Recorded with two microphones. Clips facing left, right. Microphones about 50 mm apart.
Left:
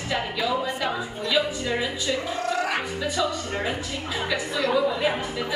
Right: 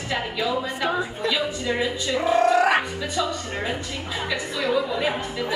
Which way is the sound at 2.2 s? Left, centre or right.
Right.